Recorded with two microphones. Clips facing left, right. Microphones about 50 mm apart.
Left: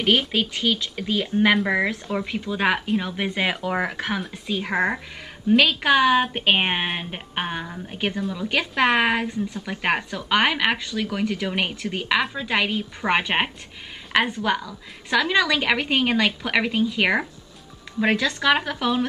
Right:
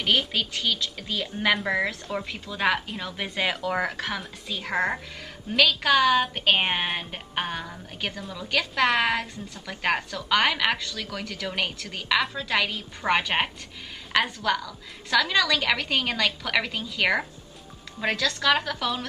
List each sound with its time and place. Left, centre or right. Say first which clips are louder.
0.0 s a woman's voice: left 4 dB; centre
8.2 s a woman's voice: left 8 dB; centre
8.5 s a woman's voice: left 2 dB; left